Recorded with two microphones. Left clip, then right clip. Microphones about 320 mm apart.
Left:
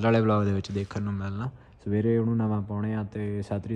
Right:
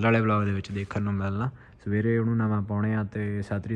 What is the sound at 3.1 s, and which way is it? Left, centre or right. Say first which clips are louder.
Speech: even; centre.